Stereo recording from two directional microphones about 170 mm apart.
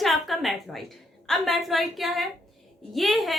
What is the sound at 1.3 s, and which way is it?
A woman's voice, centre (ahead or behind).